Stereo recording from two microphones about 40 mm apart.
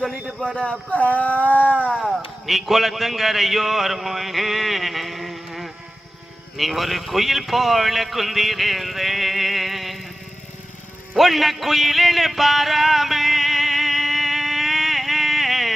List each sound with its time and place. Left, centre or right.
0.5 s speech: left
0.9 s speech: left
2.0 s a man's voice: centre
11.2 s music: centre